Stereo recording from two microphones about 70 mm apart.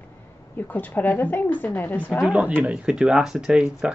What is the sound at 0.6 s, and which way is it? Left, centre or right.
A woman's voice, left.